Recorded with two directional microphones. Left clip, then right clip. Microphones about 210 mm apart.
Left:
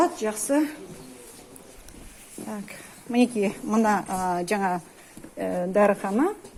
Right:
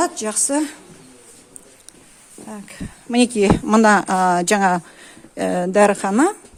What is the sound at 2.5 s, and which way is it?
Speech, 25° right (ahead or behind).